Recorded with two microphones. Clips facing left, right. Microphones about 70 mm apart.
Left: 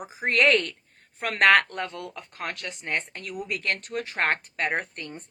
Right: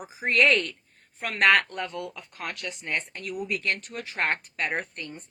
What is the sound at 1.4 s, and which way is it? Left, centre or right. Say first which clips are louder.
Speech: left 2 dB; left.